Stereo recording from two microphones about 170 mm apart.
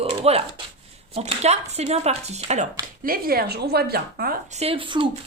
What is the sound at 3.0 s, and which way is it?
A woman's voice, 60° right (ahead or behind).